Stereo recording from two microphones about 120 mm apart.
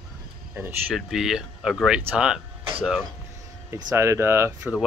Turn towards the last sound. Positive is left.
turn(degrees=-20)  # may be behind; listen again after turning